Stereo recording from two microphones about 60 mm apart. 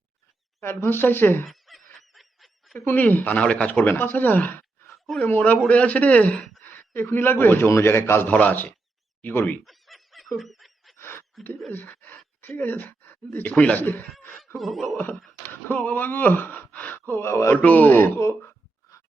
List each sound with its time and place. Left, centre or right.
0.6 s speech: left
1.5 s snicker: centre
2.7 s a man's voice: left
8.3 s speech: left
9.2 s speech: left
9.6 s snicker: centre
10.3 s honk: centre
10.9 s a sound: left
11.7 s speech: left
14.5 s a sound: centre
15.7 s speech: left
17.1 s a man's voice: left
17.7 s speech: left
18.0 s a sound: left